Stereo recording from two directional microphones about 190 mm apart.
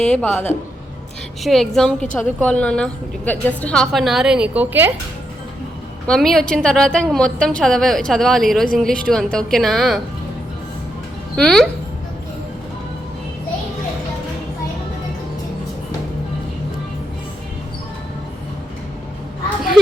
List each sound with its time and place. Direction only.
0.0 s a woman's voice: 5° left (ahead or behind)
6.1 s a woman's voice: centre (ahead or behind)
11.3 s a woman's voice: 5° left (ahead or behind)